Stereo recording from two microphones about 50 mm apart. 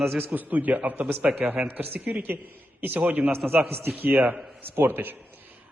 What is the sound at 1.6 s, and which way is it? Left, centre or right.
Speech, right.